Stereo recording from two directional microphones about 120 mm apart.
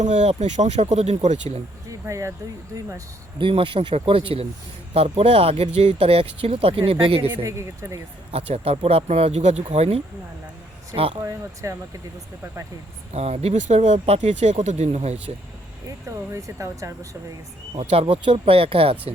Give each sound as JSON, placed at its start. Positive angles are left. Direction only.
{"t": 0.0, "sound": "speech", "side_deg": -80}
{"t": 1.9, "sound": "music", "side_deg": -25}
{"t": 3.3, "sound": "speech", "side_deg": -45}
{"t": 5.7, "sound": "speech", "side_deg": -70}
{"t": 7.4, "sound": "speech", "side_deg": -25}
{"t": 8.3, "sound": "speech", "side_deg": -55}
{"t": 11.2, "sound": "speech", "side_deg": -25}
{"t": 13.1, "sound": "speech", "side_deg": -60}
{"t": 16.0, "sound": "speech", "side_deg": -25}
{"t": 17.7, "sound": "speech", "side_deg": -55}